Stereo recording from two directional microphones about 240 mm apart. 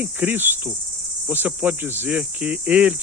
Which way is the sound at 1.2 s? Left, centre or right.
Centre.